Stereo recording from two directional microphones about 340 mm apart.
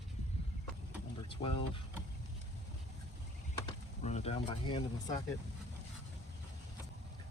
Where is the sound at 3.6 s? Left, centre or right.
Centre.